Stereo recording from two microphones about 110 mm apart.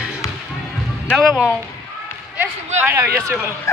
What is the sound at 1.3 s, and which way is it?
Speech, 10° right (ahead or behind).